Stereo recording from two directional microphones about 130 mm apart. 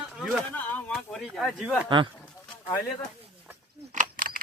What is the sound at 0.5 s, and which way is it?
Speech, 15° left (ahead or behind).